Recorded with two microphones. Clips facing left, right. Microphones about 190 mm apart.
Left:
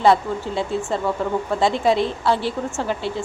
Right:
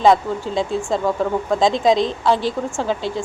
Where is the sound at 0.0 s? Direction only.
15° right (ahead or behind).